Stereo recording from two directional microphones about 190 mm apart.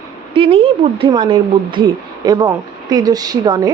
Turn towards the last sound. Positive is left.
turn(degrees=-20)  # may be behind; listen again after turning